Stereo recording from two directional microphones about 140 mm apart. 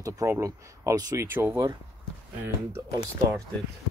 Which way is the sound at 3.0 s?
20° right (ahead or behind).